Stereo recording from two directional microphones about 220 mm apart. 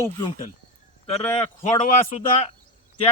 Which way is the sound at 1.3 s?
30° left (ahead or behind).